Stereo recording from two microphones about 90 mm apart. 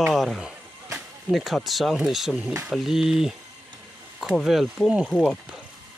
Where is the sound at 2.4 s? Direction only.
15° right (ahead or behind).